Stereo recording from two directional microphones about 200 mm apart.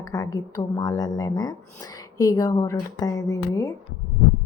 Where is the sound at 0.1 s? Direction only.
15° left (ahead or behind).